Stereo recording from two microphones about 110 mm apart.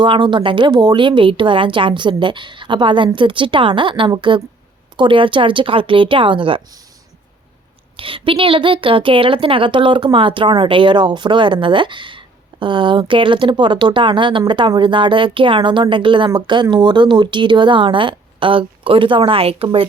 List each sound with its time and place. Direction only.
0.0 s a woman's voice: 50° right (ahead or behind)
7.9 s a woman's voice: 55° right (ahead or behind)